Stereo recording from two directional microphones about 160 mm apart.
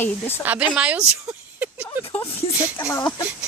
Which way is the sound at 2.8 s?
15° left (ahead or behind).